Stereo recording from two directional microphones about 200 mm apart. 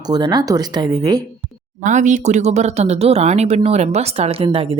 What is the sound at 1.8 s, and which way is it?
Speech, 40° right (ahead or behind).